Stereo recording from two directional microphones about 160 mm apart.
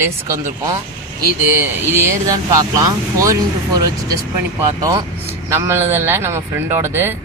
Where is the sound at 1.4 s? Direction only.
15° right (ahead or behind).